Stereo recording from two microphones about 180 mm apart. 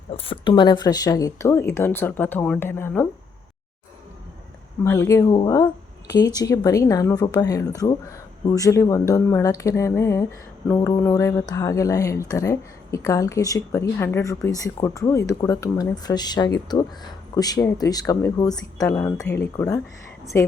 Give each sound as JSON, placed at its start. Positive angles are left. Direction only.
{"t": 0.1, "sound": "speech", "side_deg": 30}
{"t": 4.8, "sound": "speech", "side_deg": 15}